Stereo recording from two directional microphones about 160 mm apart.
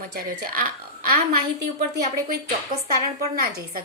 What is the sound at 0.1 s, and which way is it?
A woman's voice, 75° right (ahead or behind).